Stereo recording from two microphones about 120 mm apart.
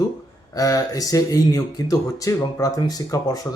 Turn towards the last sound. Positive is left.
turn(degrees=30)  # may be behind; listen again after turning